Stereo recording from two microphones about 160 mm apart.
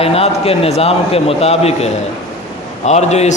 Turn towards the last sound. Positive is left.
turn(degrees=45)  # may be behind; listen again after turning